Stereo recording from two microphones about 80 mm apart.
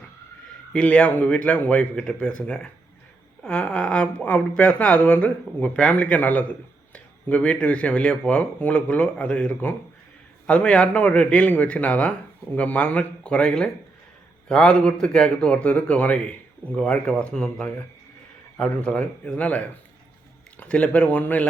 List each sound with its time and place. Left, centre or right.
0.7 s speech: centre